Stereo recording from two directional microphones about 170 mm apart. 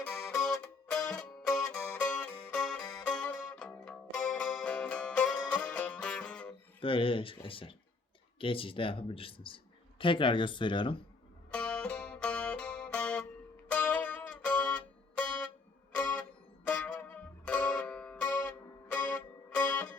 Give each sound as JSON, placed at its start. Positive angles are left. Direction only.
{"t": 0.0, "sound": "music", "side_deg": 5}
{"t": 6.7, "sound": "speech", "side_deg": 30}
{"t": 11.5, "sound": "music", "side_deg": 5}
{"t": 16.6, "sound": "music", "side_deg": 10}